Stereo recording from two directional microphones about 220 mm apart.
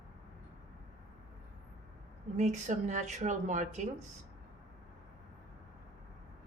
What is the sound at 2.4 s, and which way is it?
Speech, 30° right (ahead or behind).